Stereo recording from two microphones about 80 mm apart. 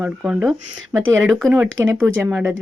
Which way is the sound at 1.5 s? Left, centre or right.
Right.